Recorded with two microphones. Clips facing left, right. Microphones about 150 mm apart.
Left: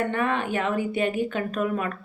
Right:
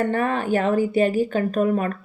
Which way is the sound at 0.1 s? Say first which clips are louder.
Right 4 dB; 40° right (ahead or behind).